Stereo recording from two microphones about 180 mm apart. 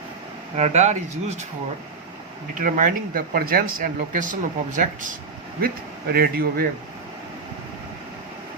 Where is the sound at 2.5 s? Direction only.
45° right (ahead or behind).